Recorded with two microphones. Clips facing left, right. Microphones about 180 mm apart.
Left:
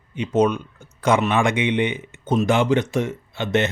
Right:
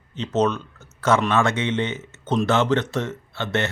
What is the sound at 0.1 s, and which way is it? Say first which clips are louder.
Speech: left 3 dB; 10° left (ahead or behind).